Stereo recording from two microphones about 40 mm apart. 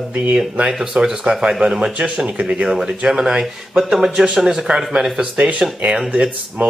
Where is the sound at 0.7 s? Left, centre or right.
Centre; by 2.7 s right.